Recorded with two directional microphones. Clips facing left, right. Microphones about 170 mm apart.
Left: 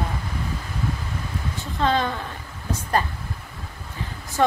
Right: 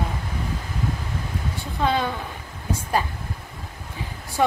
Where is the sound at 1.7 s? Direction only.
10° right (ahead or behind).